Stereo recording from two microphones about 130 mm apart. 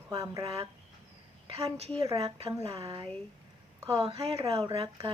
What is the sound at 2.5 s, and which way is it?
Speech, 25° right (ahead or behind).